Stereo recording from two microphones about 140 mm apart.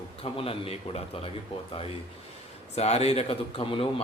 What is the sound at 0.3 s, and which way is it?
Speech, 45° left (ahead or behind).